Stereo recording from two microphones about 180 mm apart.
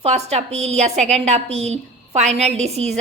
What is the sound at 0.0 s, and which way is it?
A woman's voice, 35° right (ahead or behind).